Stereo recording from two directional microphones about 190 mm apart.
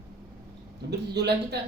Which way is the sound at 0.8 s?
60° right (ahead or behind).